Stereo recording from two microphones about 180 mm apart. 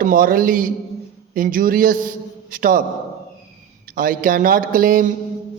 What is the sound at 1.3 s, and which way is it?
A man's voice, 50° right (ahead or behind).